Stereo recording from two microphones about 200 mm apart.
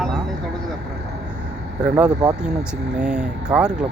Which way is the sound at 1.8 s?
5° right (ahead or behind).